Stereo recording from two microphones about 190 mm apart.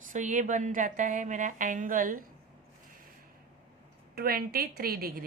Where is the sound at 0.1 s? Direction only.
40° right (ahead or behind).